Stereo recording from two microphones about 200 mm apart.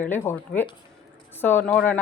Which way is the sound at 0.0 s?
10° left (ahead or behind).